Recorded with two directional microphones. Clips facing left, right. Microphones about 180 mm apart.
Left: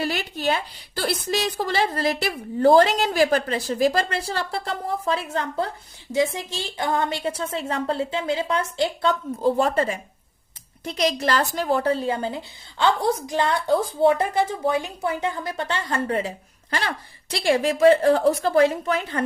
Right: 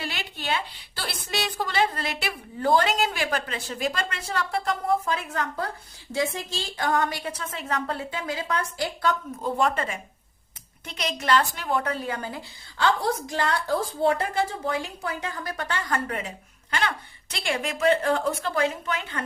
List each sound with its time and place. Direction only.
0.0 s a woman's voice: 40° left (ahead or behind)